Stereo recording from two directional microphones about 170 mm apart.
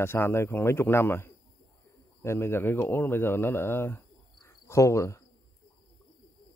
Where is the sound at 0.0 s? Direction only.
15° left (ahead or behind).